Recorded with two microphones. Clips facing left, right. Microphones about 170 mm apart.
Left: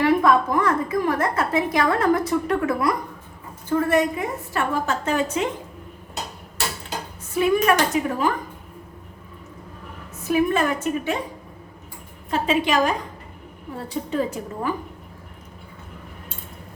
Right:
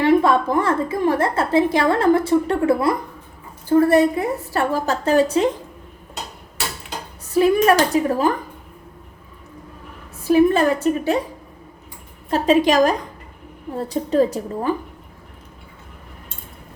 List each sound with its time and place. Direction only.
0.0 s a woman's voice: 25° right (ahead or behind)
7.3 s a woman's voice: 35° right (ahead or behind)
10.2 s a woman's voice: 35° right (ahead or behind)
12.3 s a woman's voice: 40° right (ahead or behind)